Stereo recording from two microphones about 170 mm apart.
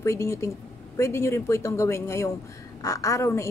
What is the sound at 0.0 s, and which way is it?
A woman's voice, 15° left (ahead or behind).